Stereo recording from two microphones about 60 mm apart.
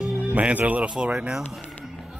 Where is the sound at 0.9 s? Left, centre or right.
Centre.